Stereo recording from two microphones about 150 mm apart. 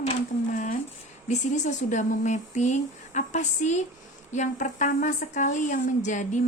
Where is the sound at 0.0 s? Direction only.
50° left (ahead or behind).